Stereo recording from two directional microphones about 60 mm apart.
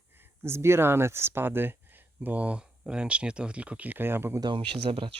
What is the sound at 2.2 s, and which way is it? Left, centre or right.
Speech, right.